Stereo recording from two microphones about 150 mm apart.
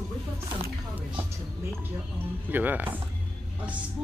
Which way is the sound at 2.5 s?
10° right (ahead or behind).